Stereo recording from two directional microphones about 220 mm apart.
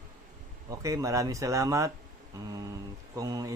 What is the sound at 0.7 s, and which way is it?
Speech, 15° right (ahead or behind).